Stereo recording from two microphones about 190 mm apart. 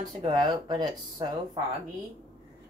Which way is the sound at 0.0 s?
25° right (ahead or behind).